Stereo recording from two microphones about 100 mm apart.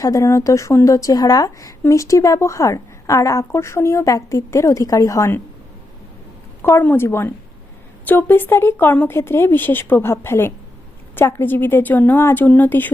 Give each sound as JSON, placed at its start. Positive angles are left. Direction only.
{"t": 0.0, "sound": "a woman's voice", "side_deg": 35}
{"t": 6.6, "sound": "speech", "side_deg": 25}